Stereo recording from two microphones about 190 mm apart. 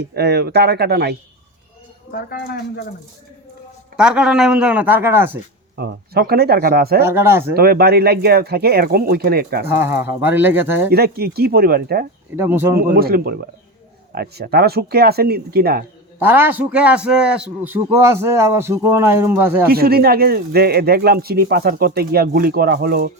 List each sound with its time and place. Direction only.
0.0 s speech: 60° right (ahead or behind)
2.1 s speech: 55° left (ahead or behind)
3.9 s a man's voice: 5° right (ahead or behind)
5.7 s speech: 55° right (ahead or behind)
7.0 s a man's voice: 10° right (ahead or behind)
7.5 s speech: 55° right (ahead or behind)
9.7 s a man's voice: 10° right (ahead or behind)
10.9 s speech: 55° right (ahead or behind)
12.4 s a man's voice: 10° right (ahead or behind)
12.8 s speech: 50° right (ahead or behind)
16.1 s a man's voice: 10° right (ahead or behind)
19.7 s speech: 55° right (ahead or behind)